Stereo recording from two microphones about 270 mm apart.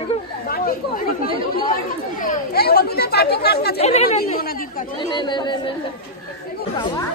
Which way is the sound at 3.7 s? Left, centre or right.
Left.